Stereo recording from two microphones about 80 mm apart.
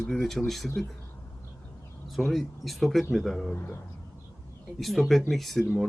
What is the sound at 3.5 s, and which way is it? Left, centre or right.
Speech, left.